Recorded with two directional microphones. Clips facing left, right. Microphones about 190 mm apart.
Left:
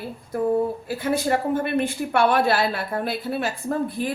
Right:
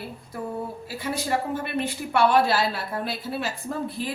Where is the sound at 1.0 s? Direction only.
55° left (ahead or behind).